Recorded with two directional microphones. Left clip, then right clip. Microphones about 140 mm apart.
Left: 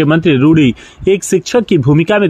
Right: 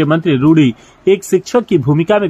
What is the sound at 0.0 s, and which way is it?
Speech, 40° left (ahead or behind).